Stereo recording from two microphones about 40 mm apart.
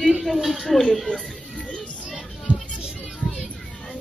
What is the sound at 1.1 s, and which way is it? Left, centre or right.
Speech, left.